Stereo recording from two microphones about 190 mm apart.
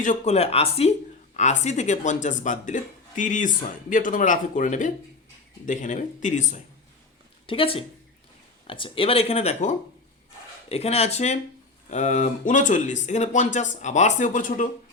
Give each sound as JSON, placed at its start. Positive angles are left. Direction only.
{"t": 0.0, "sound": "speech", "side_deg": 40}
{"t": 7.4, "sound": "a woman's voice", "side_deg": 30}